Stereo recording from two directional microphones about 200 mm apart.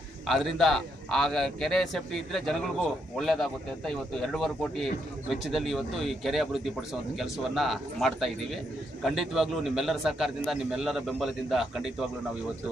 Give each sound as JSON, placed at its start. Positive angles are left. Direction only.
{"t": 0.3, "sound": "a man's voice", "side_deg": 0}